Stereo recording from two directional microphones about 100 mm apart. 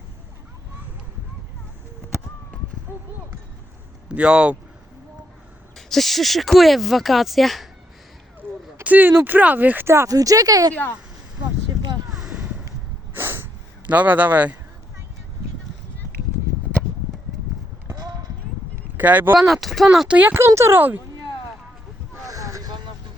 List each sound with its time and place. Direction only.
4.1 s speech: 10° right (ahead or behind)
5.7 s speech: centre (ahead or behind)
8.8 s speech: 15° right (ahead or behind); by 10.8 s 35° right (ahead or behind)
11.8 s a sound: 45° right (ahead or behind)
12.1 s a sound: 5° right (ahead or behind)
13.1 s snort: 20° right (ahead or behind)
18.9 s speech: 20° right (ahead or behind)
19.4 s speech: centre (ahead or behind)
20.1 s speech: 20° right (ahead or behind)
22.2 s boat: 35° right (ahead or behind)